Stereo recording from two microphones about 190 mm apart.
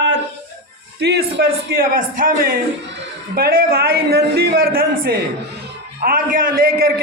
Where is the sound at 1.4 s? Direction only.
55° right (ahead or behind).